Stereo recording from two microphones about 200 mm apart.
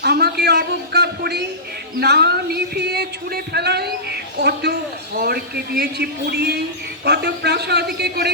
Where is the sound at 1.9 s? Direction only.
55° right (ahead or behind).